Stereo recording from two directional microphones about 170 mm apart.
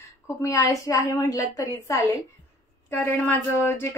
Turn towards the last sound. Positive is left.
turn(degrees=15)  # may be behind; listen again after turning